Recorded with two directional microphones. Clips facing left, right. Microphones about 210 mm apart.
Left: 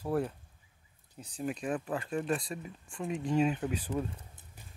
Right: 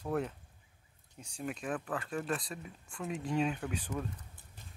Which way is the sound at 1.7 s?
25° left (ahead or behind).